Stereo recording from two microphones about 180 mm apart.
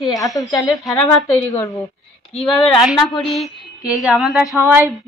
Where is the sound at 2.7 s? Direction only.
Centre (ahead or behind).